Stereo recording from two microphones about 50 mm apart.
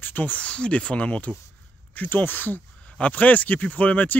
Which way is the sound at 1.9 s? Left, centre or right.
Left.